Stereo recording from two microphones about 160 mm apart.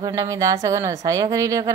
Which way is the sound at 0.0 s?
20° right (ahead or behind).